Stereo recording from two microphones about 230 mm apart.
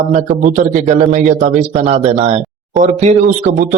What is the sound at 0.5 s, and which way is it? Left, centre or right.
Speech, right.